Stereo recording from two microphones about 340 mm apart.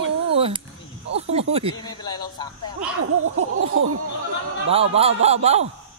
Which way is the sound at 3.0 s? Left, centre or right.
Right.